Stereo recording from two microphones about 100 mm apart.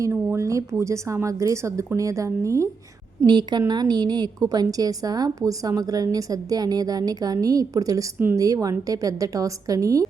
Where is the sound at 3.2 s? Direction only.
50° right (ahead or behind).